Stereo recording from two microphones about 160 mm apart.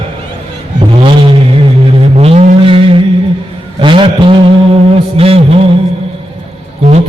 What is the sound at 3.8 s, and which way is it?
Speech, 30° right (ahead or behind).